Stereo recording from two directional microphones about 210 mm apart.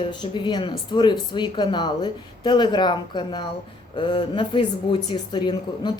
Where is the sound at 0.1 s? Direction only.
20° left (ahead or behind).